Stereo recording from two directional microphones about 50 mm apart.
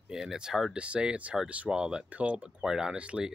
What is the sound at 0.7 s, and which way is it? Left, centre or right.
Speech, right.